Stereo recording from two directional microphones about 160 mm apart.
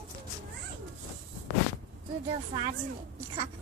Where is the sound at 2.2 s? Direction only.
35° right (ahead or behind).